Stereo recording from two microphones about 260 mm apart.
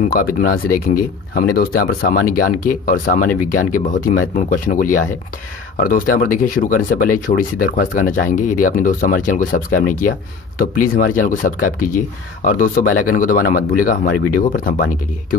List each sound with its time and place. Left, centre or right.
0.0 s speech: left